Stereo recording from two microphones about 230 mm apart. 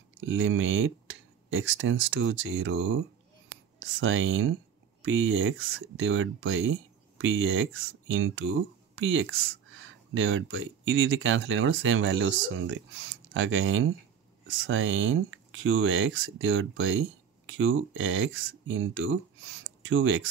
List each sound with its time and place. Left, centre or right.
0.2 s speech: right